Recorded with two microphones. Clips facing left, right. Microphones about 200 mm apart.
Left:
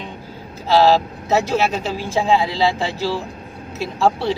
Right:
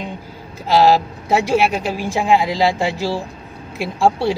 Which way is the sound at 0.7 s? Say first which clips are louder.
Right 1 dB; 15° right (ahead or behind).